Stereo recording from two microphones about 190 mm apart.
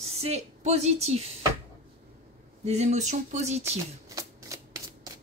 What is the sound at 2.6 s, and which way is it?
A woman's voice, 35° right (ahead or behind).